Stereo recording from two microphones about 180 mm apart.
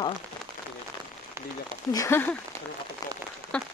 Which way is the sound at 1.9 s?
15° left (ahead or behind).